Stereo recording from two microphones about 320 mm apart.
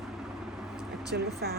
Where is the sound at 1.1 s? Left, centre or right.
Right.